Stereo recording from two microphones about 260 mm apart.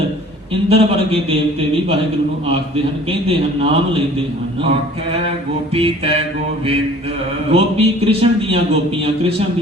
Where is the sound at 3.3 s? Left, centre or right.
Right.